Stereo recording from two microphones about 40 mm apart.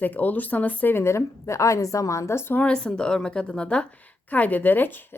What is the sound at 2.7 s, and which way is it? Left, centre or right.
Speech, left.